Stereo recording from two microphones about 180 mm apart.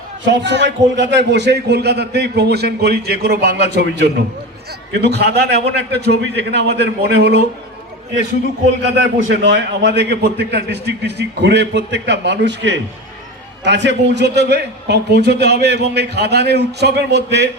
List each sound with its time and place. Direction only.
0.3 s a man's voice: 75° right (ahead or behind)
9.0 s a man's voice: 85° right; by 17.5 s 70° right (ahead or behind)